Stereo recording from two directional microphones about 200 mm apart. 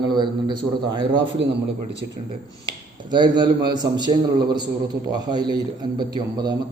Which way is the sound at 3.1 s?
20° right (ahead or behind).